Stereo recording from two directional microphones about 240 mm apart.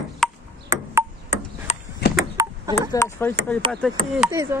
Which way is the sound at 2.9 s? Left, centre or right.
Centre.